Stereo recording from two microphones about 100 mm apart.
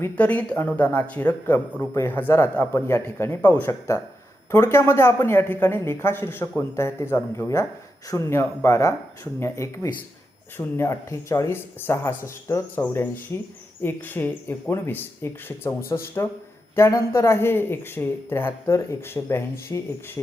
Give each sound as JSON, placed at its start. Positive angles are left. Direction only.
{"t": 0.2, "sound": "speech", "side_deg": 15}
{"t": 3.7, "sound": "a woman's voice", "side_deg": 30}